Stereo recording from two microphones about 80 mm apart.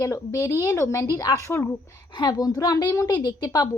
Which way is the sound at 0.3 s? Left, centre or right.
Left.